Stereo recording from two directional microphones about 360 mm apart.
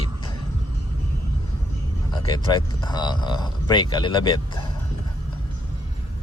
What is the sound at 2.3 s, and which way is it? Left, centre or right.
Speech, centre.